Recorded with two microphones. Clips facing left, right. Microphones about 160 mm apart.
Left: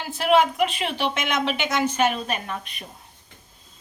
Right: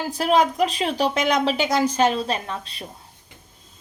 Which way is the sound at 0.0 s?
35° right (ahead or behind).